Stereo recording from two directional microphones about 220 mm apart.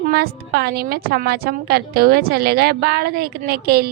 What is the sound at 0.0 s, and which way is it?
A woman's voice, 45° right (ahead or behind).